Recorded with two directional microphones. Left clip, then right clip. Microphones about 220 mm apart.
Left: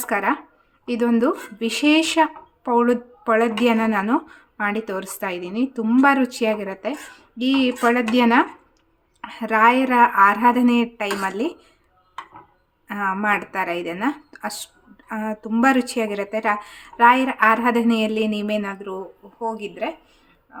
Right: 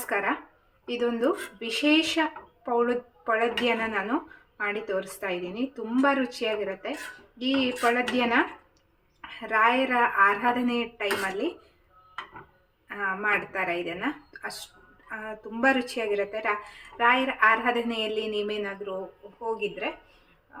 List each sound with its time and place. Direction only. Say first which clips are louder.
0.1 s speech: left 6 dB; 55° left (ahead or behind)
7.9 s a woman's voice: left 7 dB; 55° left (ahead or behind)
12.9 s a woman's voice: left 5 dB; 55° left (ahead or behind)